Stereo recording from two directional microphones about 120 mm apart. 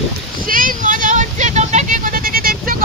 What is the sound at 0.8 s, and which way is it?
Vehicle, 90° right.